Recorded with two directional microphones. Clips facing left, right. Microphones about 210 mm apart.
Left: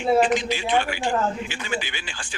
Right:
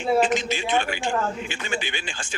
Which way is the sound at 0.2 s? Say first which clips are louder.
Left 1 dB; 25° right (ahead or behind).